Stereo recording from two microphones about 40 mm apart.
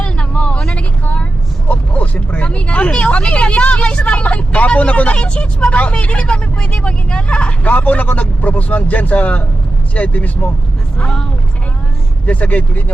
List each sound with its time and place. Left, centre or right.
0.0 s vehicle: left
0.6 s a sound: left
1.6 s vehicle: left
5.1 s speech: left
7.7 s a man's voice: left
10.9 s speech: left
12.2 s a man's voice: left